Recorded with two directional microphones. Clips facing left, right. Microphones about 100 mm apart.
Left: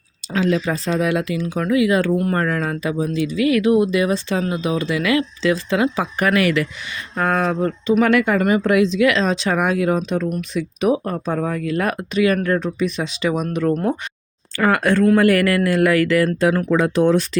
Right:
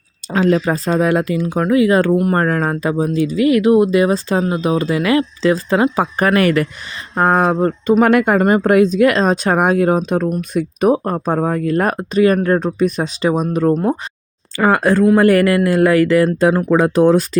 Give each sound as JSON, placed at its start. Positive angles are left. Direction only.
{"t": 0.3, "sound": "speech", "side_deg": -45}
{"t": 8.0, "sound": "speech", "side_deg": -50}